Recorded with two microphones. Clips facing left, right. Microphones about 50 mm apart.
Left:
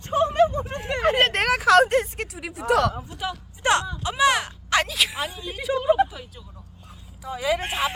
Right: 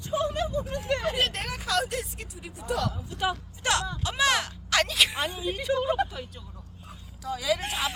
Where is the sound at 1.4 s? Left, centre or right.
Left.